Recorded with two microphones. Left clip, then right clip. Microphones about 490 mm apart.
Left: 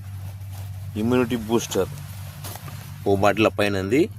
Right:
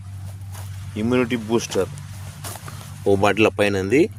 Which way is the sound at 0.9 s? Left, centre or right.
Left.